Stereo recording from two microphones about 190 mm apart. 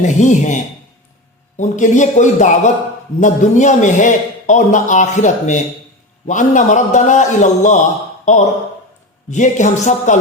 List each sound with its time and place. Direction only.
0.0 s a man's voice: 40° left (ahead or behind)